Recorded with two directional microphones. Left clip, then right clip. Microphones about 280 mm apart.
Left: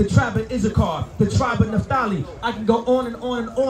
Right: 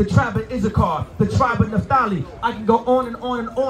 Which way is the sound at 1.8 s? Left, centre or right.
Centre.